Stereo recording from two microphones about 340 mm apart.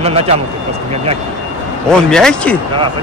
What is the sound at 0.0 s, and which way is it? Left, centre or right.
Speech, centre.